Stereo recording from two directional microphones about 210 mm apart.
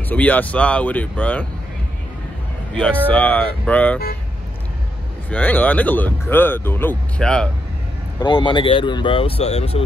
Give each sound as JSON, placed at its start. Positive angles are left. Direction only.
{"t": 0.1, "sound": "speech", "side_deg": 10}
{"t": 2.7, "sound": "speech", "side_deg": 5}
{"t": 5.3, "sound": "speech", "side_deg": 10}
{"t": 8.2, "sound": "speech", "side_deg": 25}